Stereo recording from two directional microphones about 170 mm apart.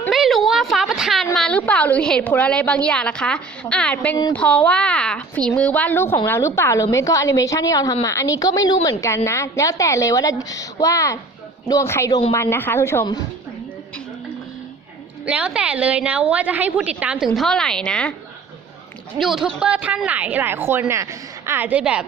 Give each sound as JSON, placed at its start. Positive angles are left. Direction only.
{"t": 0.1, "sound": "a woman's voice", "side_deg": 0}
{"t": 15.3, "sound": "a woman's voice", "side_deg": -5}
{"t": 19.2, "sound": "a woman's voice", "side_deg": 0}